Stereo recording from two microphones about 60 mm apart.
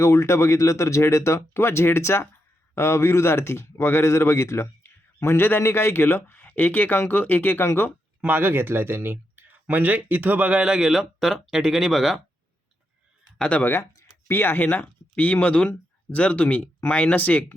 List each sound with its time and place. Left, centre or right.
0.0 s speech: left
8.2 s speech: right
10.6 s speech: centre
13.6 s speech: left